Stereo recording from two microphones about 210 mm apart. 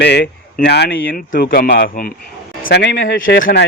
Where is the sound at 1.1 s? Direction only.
45° left (ahead or behind).